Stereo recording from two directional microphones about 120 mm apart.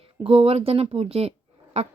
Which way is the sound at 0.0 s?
50° right (ahead or behind).